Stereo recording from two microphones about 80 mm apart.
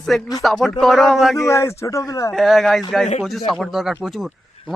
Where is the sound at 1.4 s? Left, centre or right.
Left.